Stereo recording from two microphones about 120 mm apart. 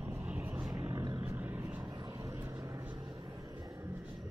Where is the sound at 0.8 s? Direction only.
30° right (ahead or behind).